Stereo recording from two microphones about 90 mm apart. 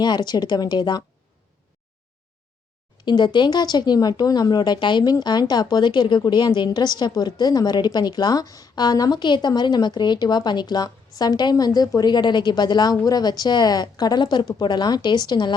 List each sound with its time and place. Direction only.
0.0 s a woman's voice: 50° left (ahead or behind)
3.0 s a woman's voice: 55° left (ahead or behind)